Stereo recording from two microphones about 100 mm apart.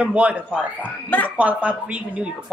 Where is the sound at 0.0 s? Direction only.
10° right (ahead or behind).